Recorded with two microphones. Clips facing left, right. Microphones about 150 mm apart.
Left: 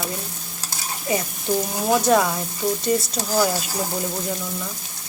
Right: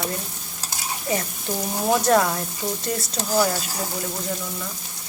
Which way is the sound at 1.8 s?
Centre (ahead or behind).